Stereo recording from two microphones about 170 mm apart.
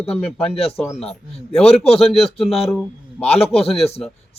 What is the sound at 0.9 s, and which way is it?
Speech, centre (ahead or behind).